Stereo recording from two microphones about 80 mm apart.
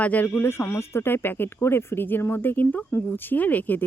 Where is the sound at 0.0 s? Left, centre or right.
Left.